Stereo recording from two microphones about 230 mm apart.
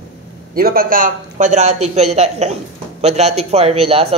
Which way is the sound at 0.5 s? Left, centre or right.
Right.